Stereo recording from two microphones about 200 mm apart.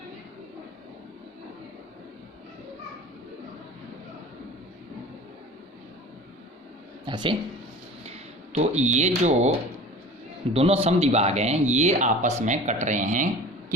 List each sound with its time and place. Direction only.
7.0 s a sound: 25° right (ahead or behind)
8.0 s speech: 35° right (ahead or behind)
10.5 s speech: 30° right (ahead or behind)